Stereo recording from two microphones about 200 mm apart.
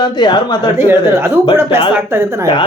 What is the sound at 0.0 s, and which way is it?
Speech, 20° left (ahead or behind).